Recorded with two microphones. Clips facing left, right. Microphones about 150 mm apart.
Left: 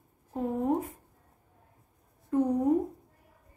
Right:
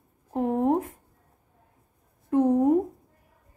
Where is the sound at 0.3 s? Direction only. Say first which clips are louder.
Right 5 dB; 65° right (ahead or behind).